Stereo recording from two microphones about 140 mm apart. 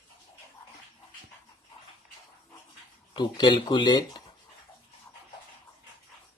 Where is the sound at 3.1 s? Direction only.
35° left (ahead or behind).